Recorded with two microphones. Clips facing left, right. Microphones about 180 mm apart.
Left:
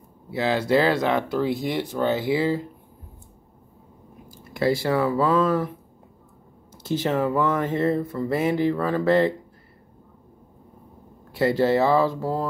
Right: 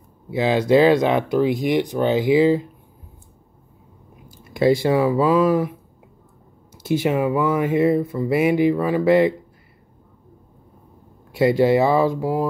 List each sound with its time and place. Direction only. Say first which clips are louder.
0.3 s speech: right 5 dB; 15° right (ahead or behind)
4.3 s speech: right 5 dB; 20° right (ahead or behind)
11.3 s speech: right 4 dB; 15° right (ahead or behind)